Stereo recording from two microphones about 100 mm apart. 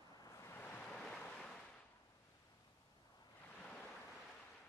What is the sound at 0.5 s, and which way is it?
Waves, 15° left (ahead or behind).